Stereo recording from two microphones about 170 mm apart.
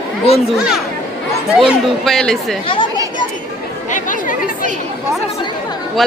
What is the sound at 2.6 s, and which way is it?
Speech, 25° left (ahead or behind).